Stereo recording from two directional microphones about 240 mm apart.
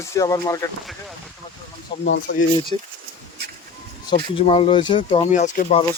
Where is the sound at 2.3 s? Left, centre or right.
Left.